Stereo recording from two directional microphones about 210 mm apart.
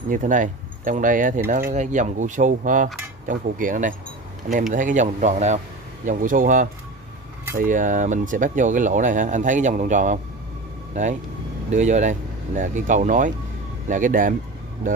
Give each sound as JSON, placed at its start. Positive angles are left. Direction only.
{"t": 0.1, "sound": "speech", "side_deg": -40}
{"t": 11.7, "sound": "speech", "side_deg": -35}